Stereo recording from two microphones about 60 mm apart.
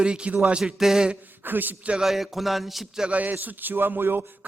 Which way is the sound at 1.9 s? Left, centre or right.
Centre.